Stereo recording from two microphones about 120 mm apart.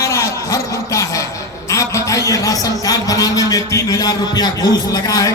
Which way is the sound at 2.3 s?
30° left (ahead or behind).